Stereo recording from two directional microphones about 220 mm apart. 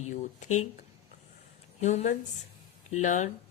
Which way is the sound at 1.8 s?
30° left (ahead or behind).